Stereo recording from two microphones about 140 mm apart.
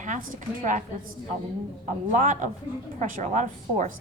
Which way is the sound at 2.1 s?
65° right (ahead or behind).